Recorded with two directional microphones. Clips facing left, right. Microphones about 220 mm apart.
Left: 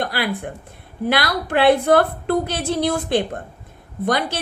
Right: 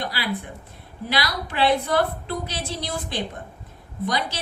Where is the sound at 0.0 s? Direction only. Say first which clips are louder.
Left 5 dB; 55° left (ahead or behind).